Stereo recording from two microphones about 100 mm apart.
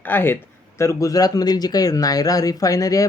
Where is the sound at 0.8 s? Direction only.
30° left (ahead or behind).